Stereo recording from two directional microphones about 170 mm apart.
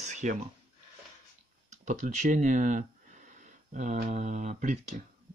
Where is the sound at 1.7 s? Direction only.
45° right (ahead or behind).